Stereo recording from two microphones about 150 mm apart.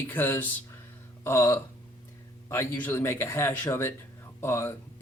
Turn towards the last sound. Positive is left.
turn(degrees=15)  # may be behind; listen again after turning